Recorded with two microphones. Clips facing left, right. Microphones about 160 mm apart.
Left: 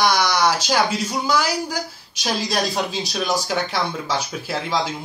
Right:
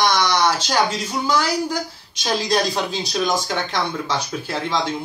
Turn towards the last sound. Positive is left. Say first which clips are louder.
# even
turn(degrees=5)  # may be behind; listen again after turning